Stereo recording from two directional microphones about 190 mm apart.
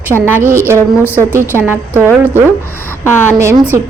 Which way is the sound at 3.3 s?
15° right (ahead or behind).